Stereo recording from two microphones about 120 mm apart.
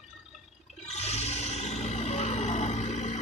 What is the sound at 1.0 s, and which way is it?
Music, 65° left (ahead or behind).